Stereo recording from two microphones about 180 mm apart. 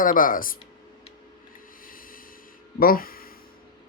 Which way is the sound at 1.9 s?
50° left (ahead or behind).